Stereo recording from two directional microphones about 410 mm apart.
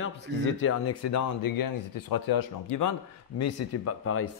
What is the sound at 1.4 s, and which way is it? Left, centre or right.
A man's voice, left.